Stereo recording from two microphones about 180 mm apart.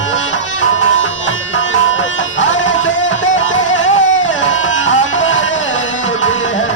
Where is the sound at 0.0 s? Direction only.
90° left.